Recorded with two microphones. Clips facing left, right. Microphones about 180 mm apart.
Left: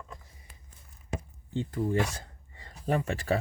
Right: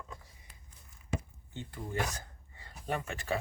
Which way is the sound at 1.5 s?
35° left (ahead or behind).